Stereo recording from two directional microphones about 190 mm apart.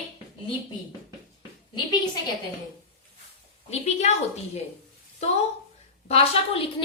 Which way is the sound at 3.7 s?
35° left (ahead or behind).